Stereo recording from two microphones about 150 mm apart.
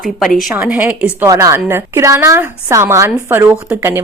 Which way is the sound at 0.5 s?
10° right (ahead or behind).